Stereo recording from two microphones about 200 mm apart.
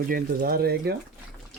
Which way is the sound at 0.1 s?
50° right (ahead or behind).